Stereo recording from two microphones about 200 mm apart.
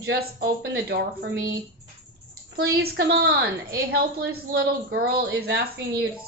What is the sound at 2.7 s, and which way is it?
Speech, 50° right (ahead or behind).